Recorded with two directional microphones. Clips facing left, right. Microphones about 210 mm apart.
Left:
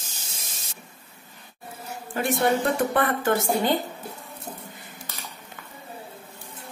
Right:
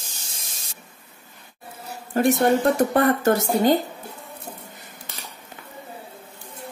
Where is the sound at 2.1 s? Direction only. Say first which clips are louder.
Right 5 dB; 40° right (ahead or behind).